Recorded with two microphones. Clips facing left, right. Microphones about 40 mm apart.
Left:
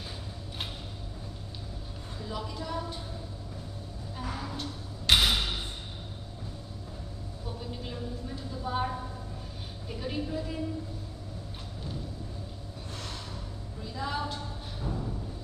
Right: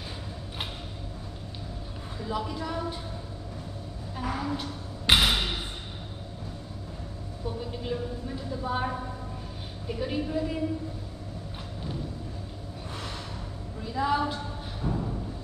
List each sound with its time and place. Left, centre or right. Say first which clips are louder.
2.1 s a woman's voice: right 5 dB; centre
4.2 s a sound: right 6 dB; right
7.7 s a woman's voice: right 5 dB; centre
13.9 s a woman's voice: right 8 dB; centre
14.8 s music: right 5 dB; right